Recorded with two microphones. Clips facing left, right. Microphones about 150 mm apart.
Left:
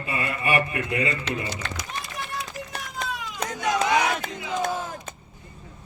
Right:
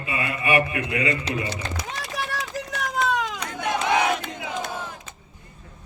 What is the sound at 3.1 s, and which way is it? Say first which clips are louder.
Cat: right 9 dB; 90° right.